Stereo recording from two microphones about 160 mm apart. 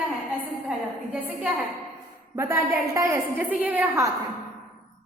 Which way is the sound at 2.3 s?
15° right (ahead or behind).